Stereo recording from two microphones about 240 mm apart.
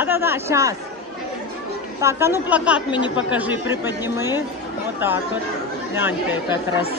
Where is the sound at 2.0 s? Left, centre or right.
Centre.